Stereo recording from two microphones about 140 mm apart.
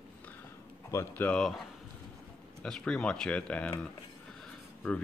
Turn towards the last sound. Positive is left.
turn(degrees=0)  # may be behind; listen again after turning